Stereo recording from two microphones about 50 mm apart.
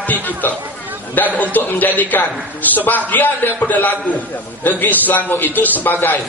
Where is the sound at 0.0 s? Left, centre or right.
Left.